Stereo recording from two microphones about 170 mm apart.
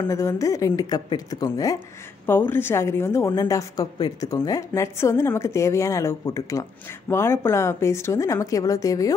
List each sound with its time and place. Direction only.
0.1 s a woman's voice: 15° left (ahead or behind)